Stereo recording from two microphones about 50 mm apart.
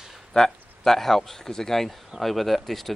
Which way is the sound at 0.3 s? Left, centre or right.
Centre.